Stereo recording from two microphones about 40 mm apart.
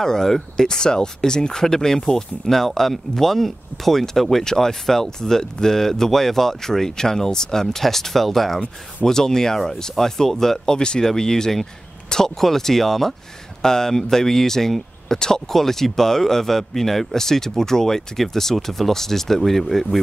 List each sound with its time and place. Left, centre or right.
0.0 s speech: centre
10.8 s speech: centre